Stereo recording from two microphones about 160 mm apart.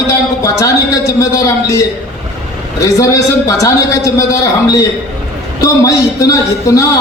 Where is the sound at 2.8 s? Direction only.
20° left (ahead or behind).